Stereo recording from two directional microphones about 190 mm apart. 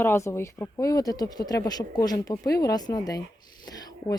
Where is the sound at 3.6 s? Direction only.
20° left (ahead or behind).